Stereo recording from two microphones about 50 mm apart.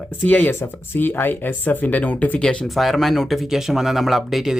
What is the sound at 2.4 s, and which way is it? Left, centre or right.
Speech, left.